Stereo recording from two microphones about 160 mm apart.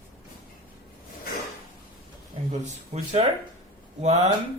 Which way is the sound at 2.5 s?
45° right (ahead or behind).